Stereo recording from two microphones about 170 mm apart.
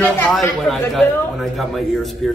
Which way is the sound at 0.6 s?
Centre (ahead or behind).